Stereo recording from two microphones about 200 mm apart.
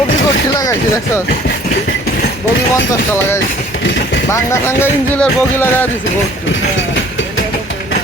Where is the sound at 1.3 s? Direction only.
50° left (ahead or behind).